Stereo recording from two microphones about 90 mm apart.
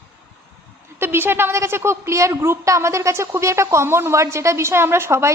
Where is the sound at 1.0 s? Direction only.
25° right (ahead or behind).